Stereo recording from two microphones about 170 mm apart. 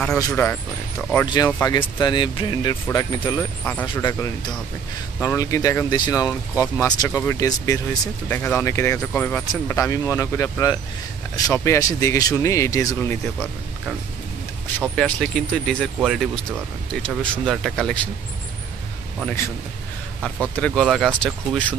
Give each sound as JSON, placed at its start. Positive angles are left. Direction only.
{"t": 0.3, "sound": "speech", "side_deg": 10}
{"t": 1.2, "sound": "speech", "side_deg": 25}
{"t": 3.8, "sound": "speech", "side_deg": 25}
{"t": 15.0, "sound": "speech", "side_deg": 5}
{"t": 20.5, "sound": "speech", "side_deg": 5}